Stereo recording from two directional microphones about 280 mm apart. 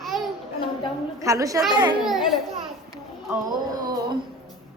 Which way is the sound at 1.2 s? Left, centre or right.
Centre.